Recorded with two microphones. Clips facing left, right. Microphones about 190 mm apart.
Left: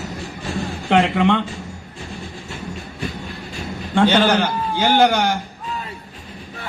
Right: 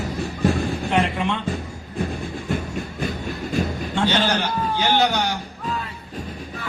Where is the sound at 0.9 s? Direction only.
75° left (ahead or behind).